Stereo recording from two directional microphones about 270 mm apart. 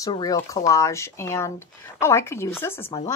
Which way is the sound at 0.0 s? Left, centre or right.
Centre.